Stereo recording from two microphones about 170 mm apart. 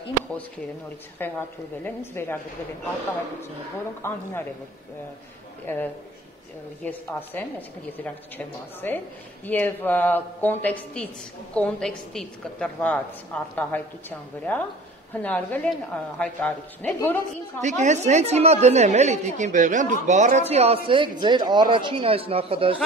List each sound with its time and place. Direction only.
1.2 s a woman's voice: 10° left (ahead or behind)
4.0 s a woman's voice: 15° left (ahead or behind)
5.7 s a woman's voice: 15° left (ahead or behind)
15.2 s a woman's voice: 10° left (ahead or behind)
17.6 s a woman's voice: 45° right (ahead or behind)